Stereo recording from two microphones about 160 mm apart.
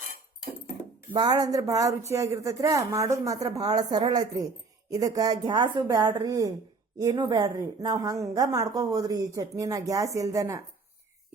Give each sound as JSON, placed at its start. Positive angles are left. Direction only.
{"t": 1.1, "sound": "a woman's voice", "side_deg": -25}